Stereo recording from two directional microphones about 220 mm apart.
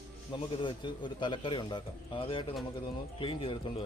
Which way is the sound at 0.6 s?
20° left (ahead or behind).